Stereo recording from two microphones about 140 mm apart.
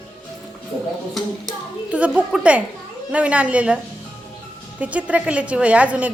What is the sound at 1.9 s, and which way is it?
A woman's voice, 10° right (ahead or behind).